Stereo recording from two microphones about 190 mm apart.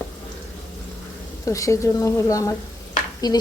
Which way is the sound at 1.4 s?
15° left (ahead or behind).